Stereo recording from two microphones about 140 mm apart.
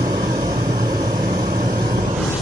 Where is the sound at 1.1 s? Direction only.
90° right.